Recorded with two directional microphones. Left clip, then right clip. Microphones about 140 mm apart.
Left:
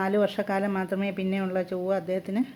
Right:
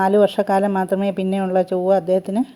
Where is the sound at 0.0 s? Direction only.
35° right (ahead or behind).